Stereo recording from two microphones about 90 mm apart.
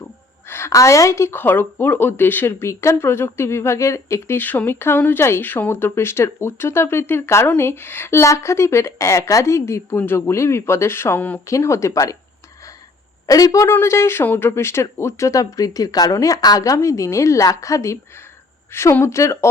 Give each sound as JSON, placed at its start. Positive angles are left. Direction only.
{"t": 0.0, "sound": "speech", "side_deg": 25}
{"t": 4.4, "sound": "speech", "side_deg": 20}
{"t": 11.4, "sound": "speech", "side_deg": 35}
{"t": 13.2, "sound": "speech", "side_deg": 40}
{"t": 13.7, "sound": "speech", "side_deg": 30}